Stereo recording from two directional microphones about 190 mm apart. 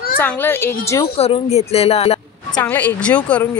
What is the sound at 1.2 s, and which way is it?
A woman's voice, 35° left (ahead or behind).